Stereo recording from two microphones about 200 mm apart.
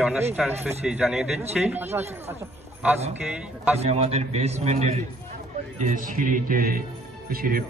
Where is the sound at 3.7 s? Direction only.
30° right (ahead or behind).